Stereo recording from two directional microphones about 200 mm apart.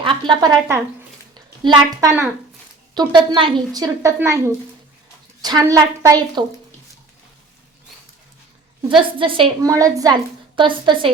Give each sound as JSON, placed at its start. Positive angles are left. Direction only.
{"t": 0.0, "sound": "a woman's voice", "side_deg": -25}
{"t": 9.1, "sound": "a woman's voice", "side_deg": -25}